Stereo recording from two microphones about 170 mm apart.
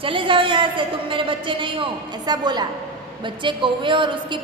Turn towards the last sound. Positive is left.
turn(degrees=-30)  # may be behind; listen again after turning